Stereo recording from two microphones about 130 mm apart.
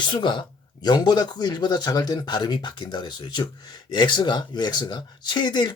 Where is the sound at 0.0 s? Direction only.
35° left (ahead or behind).